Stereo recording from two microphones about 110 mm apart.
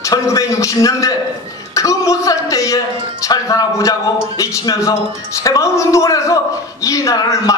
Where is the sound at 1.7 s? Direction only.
30° left (ahead or behind).